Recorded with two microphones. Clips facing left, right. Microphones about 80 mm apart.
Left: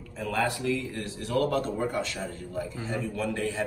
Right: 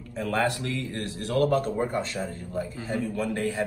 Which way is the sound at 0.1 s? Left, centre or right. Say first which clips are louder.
Right 2 dB; right.